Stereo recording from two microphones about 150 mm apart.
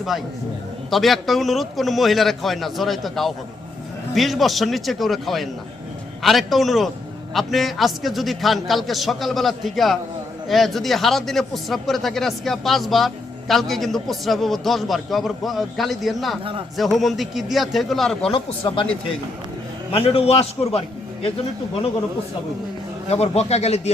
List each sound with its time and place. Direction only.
0.9 s speech: centre (ahead or behind)
18.3 s a man's voice: 35° left (ahead or behind)
19.9 s a man's voice: 40° left (ahead or behind)
23.0 s speech: 45° left (ahead or behind)